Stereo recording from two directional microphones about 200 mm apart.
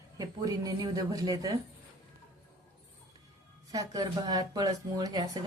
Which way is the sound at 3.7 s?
20° right (ahead or behind).